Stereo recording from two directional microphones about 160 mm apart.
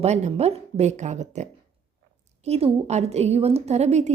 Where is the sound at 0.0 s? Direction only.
45° right (ahead or behind).